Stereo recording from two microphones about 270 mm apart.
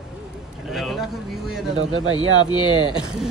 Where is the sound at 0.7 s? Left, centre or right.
Centre.